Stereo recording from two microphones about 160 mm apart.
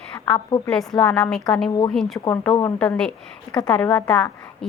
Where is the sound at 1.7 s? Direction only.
25° left (ahead or behind).